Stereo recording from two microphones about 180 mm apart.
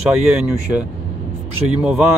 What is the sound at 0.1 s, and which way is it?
Speech, 5° right (ahead or behind).